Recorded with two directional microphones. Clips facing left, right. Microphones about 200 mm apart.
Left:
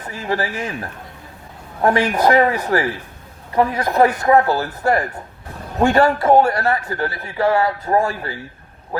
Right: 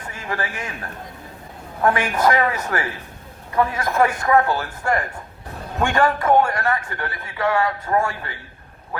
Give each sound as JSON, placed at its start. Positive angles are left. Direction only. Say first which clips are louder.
{"t": 0.1, "sound": "a man's voice", "louder": "left 6 dB", "side_deg": 30}